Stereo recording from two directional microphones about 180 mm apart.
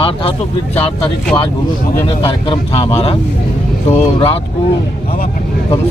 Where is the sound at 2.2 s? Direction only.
30° left (ahead or behind).